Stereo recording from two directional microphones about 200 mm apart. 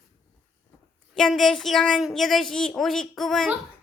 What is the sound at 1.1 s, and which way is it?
Speech, centre (ahead or behind).